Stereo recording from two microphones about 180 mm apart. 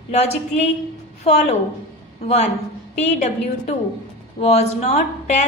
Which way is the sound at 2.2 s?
35° left (ahead or behind).